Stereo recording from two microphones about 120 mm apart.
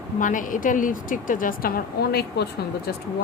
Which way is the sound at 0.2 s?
90° left.